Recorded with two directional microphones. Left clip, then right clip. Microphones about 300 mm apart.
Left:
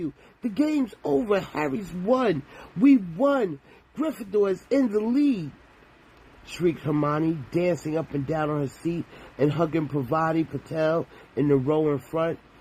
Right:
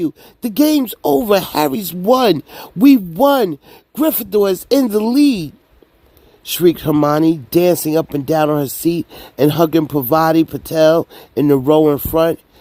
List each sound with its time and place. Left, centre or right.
0.0 s speech: right